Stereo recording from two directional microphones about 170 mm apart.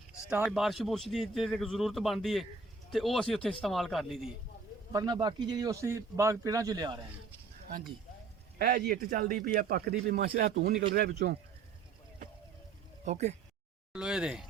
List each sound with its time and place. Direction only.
0.1 s a man's voice: 5° right (ahead or behind)
4.9 s a man's voice: 20° right (ahead or behind)
8.5 s speech: 65° right (ahead or behind)
13.1 s speech: 40° right (ahead or behind)
13.9 s a man's voice: 5° right (ahead or behind)